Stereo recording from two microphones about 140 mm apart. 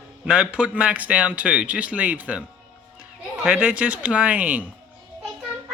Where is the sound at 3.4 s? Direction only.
10° right (ahead or behind).